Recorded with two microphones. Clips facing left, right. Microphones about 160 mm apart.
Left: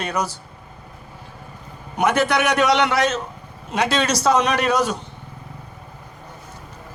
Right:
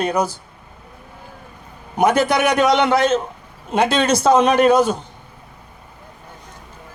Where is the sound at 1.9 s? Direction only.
10° right (ahead or behind).